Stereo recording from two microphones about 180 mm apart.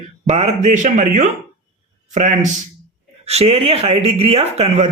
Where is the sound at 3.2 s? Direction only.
35° right (ahead or behind).